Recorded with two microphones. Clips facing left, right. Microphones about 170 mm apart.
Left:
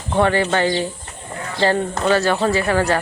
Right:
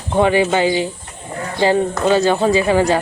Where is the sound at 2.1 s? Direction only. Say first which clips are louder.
Right 3 dB; 15° right (ahead or behind).